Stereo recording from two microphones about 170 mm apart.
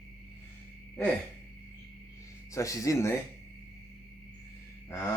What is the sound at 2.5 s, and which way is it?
Speech, 20° left (ahead or behind).